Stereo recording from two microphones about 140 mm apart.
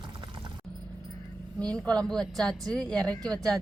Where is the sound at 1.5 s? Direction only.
5° left (ahead or behind).